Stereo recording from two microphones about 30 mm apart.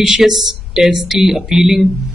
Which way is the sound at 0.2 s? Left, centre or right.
Centre.